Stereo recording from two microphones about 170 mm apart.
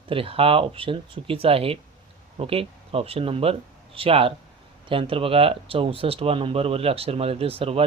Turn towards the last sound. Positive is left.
turn(degrees=-35)  # may be behind; listen again after turning